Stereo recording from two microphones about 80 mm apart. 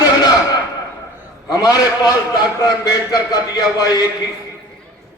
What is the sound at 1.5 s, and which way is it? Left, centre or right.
A man's voice, left.